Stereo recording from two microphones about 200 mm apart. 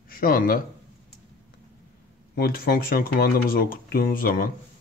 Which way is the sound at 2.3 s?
50° left (ahead or behind).